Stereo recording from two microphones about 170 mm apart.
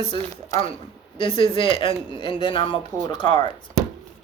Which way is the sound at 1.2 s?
30° left (ahead or behind).